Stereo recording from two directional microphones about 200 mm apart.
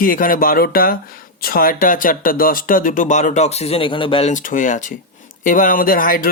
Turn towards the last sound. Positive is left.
turn(degrees=45)  # may be behind; listen again after turning